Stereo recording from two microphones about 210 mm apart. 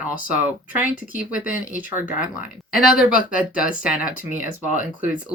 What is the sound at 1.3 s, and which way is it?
Speech, 40° left (ahead or behind).